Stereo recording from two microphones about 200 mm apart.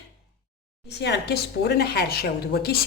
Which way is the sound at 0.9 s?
55° left (ahead or behind).